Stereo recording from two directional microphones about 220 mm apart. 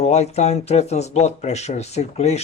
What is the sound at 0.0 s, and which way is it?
Speech, 30° left (ahead or behind).